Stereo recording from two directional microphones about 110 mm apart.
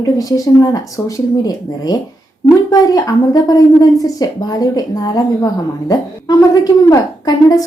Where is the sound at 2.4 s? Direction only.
35° left (ahead or behind).